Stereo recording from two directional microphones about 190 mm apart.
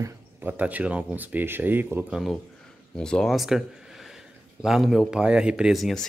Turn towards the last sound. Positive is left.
turn(degrees=0)  # may be behind; listen again after turning